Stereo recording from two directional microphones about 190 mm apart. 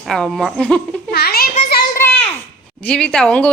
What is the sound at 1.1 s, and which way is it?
Speech, 55° left (ahead or behind).